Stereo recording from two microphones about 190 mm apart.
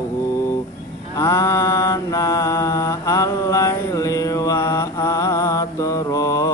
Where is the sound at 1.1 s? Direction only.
15° left (ahead or behind).